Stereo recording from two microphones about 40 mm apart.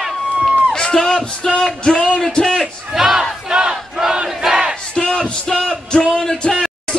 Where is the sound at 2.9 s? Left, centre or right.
Centre.